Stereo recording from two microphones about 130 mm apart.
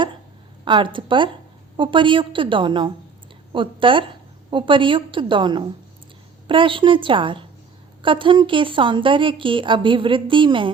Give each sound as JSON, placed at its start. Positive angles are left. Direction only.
{"t": 0.6, "sound": "a woman's voice", "side_deg": -40}